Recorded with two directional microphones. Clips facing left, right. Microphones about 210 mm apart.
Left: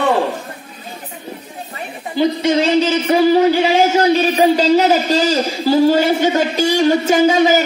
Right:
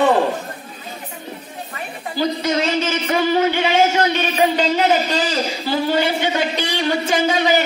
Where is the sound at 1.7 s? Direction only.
25° left (ahead or behind); by 7.6 s 45° left (ahead or behind).